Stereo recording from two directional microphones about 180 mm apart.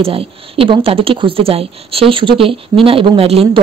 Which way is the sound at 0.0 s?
30° right (ahead or behind).